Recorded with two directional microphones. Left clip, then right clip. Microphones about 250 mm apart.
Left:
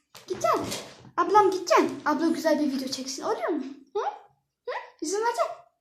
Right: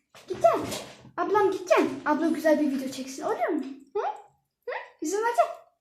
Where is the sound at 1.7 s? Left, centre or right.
Centre.